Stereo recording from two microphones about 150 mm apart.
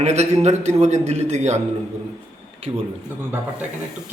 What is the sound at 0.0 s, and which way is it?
A man's voice, 50° right (ahead or behind).